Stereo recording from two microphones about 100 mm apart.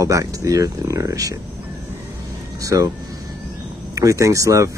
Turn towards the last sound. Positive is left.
turn(degrees=-35)  # may be behind; listen again after turning